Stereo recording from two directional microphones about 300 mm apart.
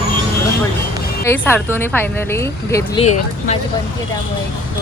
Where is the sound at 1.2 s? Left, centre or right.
Centre.